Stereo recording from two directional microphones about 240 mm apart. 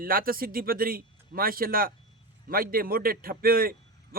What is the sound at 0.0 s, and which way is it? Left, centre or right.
A man's voice, right.